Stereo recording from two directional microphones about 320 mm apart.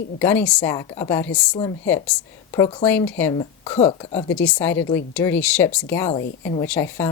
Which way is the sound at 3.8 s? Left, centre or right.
Centre.